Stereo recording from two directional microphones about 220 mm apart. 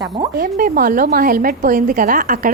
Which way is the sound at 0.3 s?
40° right (ahead or behind).